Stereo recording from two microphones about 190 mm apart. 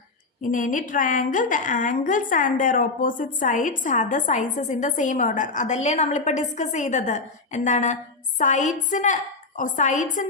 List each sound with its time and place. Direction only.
0.4 s a woman's voice: 45° left (ahead or behind)